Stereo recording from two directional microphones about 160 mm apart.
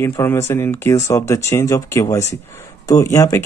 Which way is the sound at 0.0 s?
15° left (ahead or behind).